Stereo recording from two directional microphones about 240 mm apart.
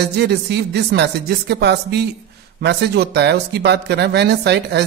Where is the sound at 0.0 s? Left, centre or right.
Right.